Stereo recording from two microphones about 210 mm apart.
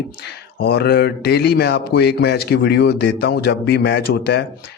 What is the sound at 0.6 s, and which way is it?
Speech, 50° left (ahead or behind).